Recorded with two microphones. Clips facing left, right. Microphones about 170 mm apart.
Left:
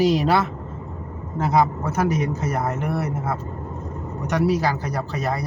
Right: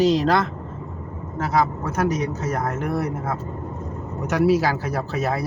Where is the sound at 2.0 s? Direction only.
10° left (ahead or behind).